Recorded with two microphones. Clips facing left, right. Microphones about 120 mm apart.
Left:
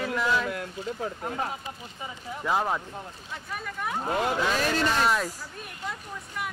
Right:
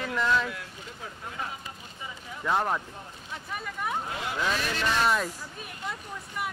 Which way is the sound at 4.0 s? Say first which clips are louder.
Left 5 dB; 45° left (ahead or behind).